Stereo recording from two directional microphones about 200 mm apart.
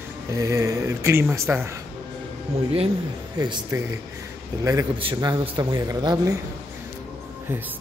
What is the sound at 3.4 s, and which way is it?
A man's voice, 20° right (ahead or behind).